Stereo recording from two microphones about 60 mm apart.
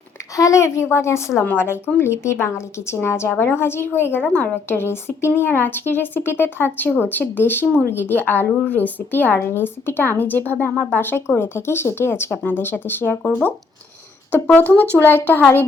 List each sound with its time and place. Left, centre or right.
0.3 s a woman's voice: left
1.5 s a woman's voice: left
14.5 s speech: left